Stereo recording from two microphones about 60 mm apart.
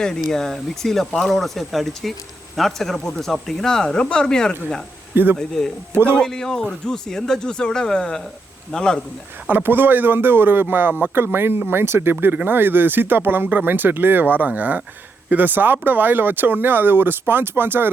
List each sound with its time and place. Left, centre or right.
0.0 s speech: centre
5.1 s speech: right
5.4 s speech: centre
9.5 s speech: right